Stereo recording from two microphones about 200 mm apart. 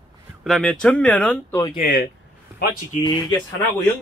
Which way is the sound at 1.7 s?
40° left (ahead or behind).